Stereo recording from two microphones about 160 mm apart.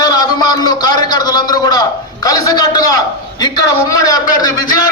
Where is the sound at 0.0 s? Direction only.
25° left (ahead or behind).